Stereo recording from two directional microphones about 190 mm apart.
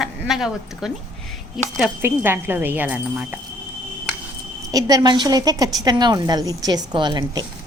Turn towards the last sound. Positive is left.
turn(degrees=-20)  # may be behind; listen again after turning